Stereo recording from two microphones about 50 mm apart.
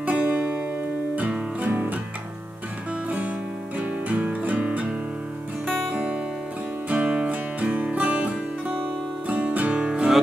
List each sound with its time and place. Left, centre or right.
0.0 s music: right
1.6 s music: right
3.8 s music: right